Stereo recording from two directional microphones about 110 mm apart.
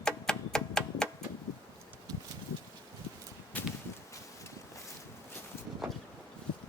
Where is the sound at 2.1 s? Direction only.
35° right (ahead or behind).